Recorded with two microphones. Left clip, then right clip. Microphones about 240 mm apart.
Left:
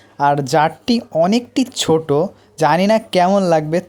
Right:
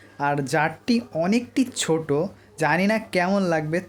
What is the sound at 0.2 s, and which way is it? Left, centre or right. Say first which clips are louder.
A woman's voice: left 8 dB; left.